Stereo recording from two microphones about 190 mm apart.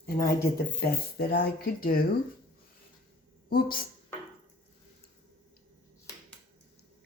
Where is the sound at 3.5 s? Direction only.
50° left (ahead or behind).